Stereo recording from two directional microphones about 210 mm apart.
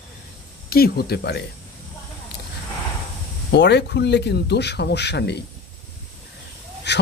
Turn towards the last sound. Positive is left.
turn(degrees=55)  # may be behind; listen again after turning